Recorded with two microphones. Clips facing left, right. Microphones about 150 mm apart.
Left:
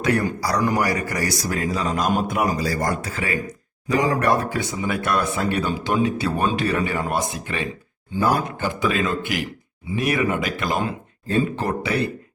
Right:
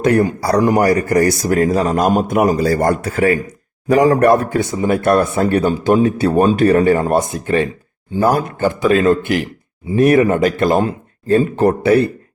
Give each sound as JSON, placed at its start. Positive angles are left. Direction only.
{"t": 0.0, "sound": "a man's voice", "side_deg": -50}
{"t": 8.2, "sound": "a man's voice", "side_deg": -40}